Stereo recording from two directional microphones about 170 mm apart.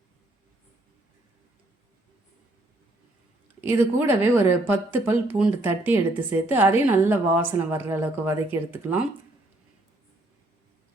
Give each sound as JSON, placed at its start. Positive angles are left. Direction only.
{"t": 3.6, "sound": "speech", "side_deg": -15}